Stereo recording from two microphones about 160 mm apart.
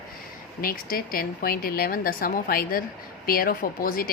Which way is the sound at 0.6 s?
65° left (ahead or behind).